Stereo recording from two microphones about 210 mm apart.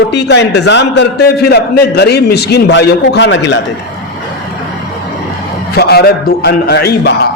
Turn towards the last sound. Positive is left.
turn(degrees=50)  # may be behind; listen again after turning